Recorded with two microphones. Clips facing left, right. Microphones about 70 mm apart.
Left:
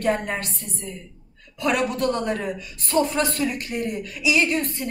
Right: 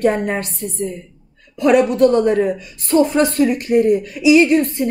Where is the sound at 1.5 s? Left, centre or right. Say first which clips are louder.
Right 10 dB; right.